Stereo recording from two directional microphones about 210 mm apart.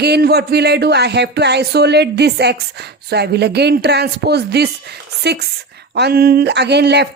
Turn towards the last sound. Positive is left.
turn(degrees=-55)  # may be behind; listen again after turning